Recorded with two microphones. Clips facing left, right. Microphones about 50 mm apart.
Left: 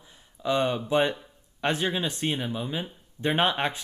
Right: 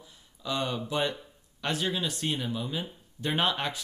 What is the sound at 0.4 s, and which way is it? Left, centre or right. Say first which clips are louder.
Speech: left 6 dB; left.